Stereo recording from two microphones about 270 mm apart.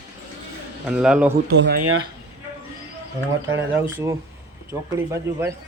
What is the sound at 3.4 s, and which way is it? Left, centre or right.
Speech, centre.